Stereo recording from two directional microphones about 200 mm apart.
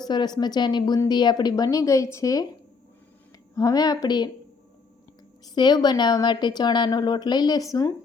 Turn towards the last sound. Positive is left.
turn(degrees=15)  # may be behind; listen again after turning